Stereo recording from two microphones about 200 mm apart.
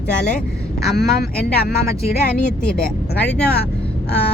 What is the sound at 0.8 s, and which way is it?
Speech, 50° left (ahead or behind).